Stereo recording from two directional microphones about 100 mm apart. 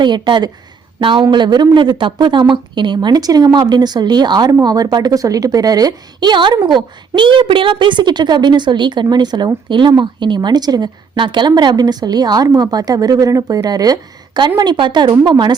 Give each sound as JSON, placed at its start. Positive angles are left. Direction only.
{"t": 0.0, "sound": "a woman's voice", "side_deg": -50}